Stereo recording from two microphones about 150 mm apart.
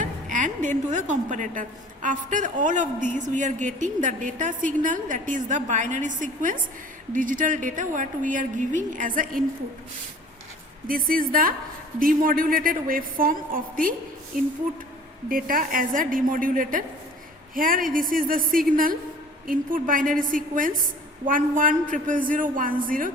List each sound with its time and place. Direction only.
0.0 s a woman's voice: 60° right (ahead or behind)
10.8 s a woman's voice: 70° right (ahead or behind)
15.3 s a woman's voice: 70° right (ahead or behind)